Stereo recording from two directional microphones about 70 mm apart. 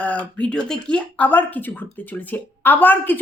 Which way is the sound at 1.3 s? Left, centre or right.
Left.